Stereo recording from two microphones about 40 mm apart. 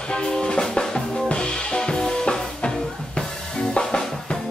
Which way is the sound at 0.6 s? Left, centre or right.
Centre.